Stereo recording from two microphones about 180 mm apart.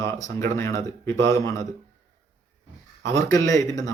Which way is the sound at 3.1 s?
15° left (ahead or behind).